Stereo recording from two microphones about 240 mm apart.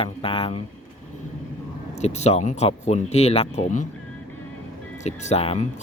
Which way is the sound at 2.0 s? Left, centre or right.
Left.